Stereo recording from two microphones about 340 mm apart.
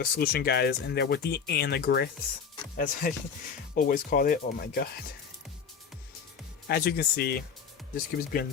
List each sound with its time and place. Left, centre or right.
0.0 s speech: left
6.7 s speech: left